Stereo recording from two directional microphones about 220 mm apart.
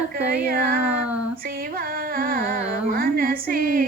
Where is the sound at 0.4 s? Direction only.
45° right (ahead or behind).